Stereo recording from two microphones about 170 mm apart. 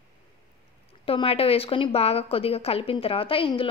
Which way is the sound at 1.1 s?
35° left (ahead or behind).